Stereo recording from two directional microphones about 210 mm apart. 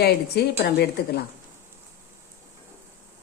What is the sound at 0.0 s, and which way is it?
A woman's voice, 50° left (ahead or behind).